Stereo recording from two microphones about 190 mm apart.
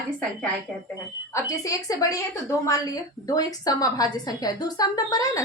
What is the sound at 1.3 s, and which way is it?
A woman's voice, 15° left (ahead or behind).